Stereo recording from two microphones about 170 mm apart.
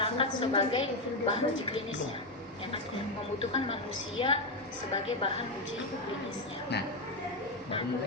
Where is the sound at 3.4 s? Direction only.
35° left (ahead or behind).